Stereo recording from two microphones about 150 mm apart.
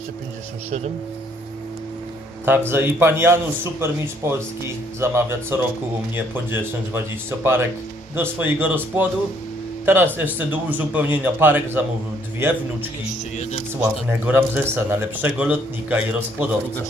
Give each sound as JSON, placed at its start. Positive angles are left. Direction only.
{"t": 2.4, "sound": "speech", "side_deg": -15}
{"t": 13.4, "sound": "speech", "side_deg": 50}
{"t": 13.7, "sound": "speech", "side_deg": -10}